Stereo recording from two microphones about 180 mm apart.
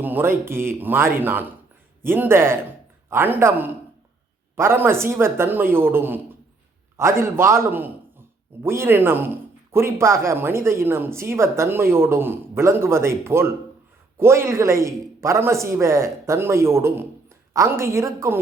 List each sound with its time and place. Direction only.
0.0 s speech: 10° right (ahead or behind)